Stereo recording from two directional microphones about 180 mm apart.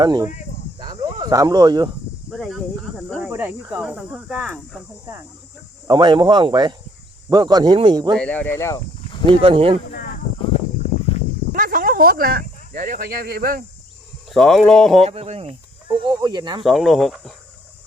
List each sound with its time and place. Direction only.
0.0 s speech: 20° right (ahead or behind)
0.8 s cricket: 20° right (ahead or behind)
2.3 s speech: centre (ahead or behind)
3.2 s speech: 10° right (ahead or behind)
5.9 s speech: 25° right (ahead or behind)
8.1 s speech: 5° left (ahead or behind)
9.3 s speech: 30° right (ahead or behind)
11.5 s speech: 50° right (ahead or behind)
14.3 s speech: centre (ahead or behind)
15.0 s speech: 35° right (ahead or behind)
16.6 s speech: centre (ahead or behind)